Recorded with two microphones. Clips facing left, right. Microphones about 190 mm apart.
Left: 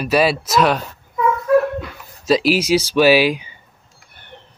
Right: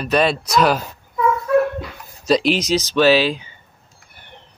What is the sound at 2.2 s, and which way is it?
Speech, 5° left (ahead or behind).